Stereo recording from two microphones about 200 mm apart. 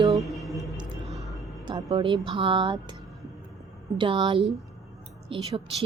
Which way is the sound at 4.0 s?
25° right (ahead or behind).